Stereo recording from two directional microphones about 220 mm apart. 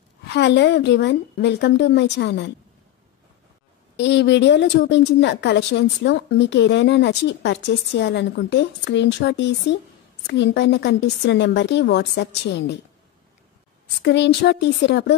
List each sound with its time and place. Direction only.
0.3 s a woman's voice: 55° left (ahead or behind)
3.9 s a woman's voice: 50° left (ahead or behind)
14.0 s a woman's voice: 50° left (ahead or behind)